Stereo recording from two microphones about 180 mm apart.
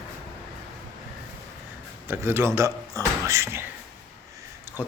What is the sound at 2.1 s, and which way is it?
Speech, 15° right (ahead or behind).